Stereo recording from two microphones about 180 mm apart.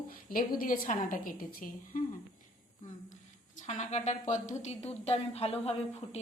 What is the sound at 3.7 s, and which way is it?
Speech, 40° left (ahead or behind).